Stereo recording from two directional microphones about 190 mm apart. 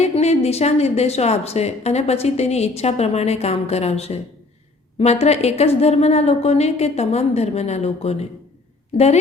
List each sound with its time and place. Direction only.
0.0 s a woman's voice: 35° left (ahead or behind)